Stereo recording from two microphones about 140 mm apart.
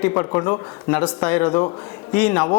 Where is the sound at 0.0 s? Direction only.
15° left (ahead or behind).